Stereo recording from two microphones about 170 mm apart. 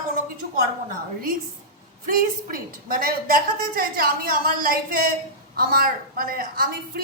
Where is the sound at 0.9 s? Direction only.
55° right (ahead or behind).